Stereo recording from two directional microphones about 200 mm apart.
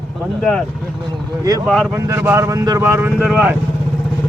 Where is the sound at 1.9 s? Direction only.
10° right (ahead or behind).